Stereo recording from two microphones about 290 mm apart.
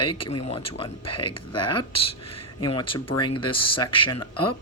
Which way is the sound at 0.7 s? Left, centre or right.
Centre.